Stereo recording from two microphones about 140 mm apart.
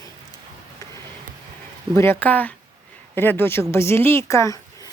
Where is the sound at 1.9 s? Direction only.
20° left (ahead or behind).